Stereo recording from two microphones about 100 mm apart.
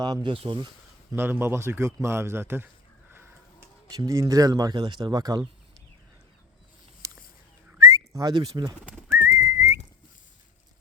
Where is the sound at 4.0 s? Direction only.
35° right (ahead or behind).